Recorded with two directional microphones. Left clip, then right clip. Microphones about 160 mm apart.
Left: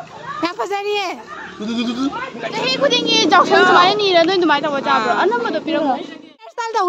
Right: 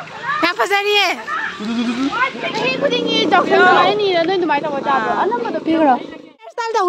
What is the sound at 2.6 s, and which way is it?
Speech, 90° left.